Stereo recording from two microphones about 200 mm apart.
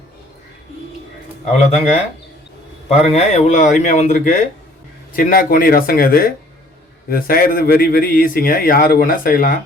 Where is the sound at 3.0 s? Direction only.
30° left (ahead or behind).